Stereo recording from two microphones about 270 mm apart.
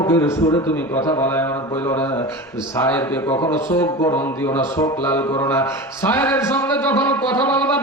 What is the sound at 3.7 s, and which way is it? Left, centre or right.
Speech, centre.